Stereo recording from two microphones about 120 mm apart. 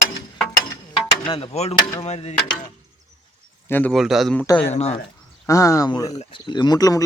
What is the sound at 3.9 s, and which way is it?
Speech, centre (ahead or behind).